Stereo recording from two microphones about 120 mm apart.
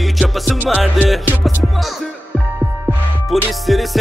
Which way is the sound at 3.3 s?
Centre (ahead or behind).